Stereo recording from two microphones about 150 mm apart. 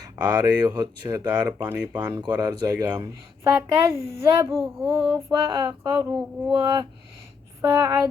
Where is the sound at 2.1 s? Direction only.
30° right (ahead or behind).